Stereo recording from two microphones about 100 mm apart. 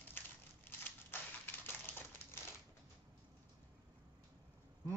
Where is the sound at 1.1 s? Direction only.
20° left (ahead or behind).